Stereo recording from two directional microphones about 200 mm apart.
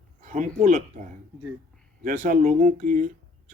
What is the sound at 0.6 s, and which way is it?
Speech, 40° right (ahead or behind).